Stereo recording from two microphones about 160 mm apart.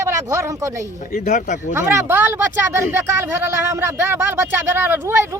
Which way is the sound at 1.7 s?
15° right (ahead or behind).